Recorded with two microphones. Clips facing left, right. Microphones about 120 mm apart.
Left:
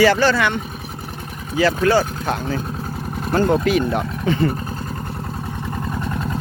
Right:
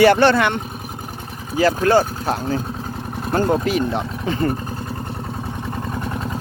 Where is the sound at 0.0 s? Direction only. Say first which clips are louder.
Right 2 dB; 60° right (ahead or behind).